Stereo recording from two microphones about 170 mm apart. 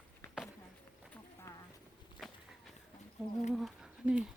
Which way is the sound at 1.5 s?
15° left (ahead or behind).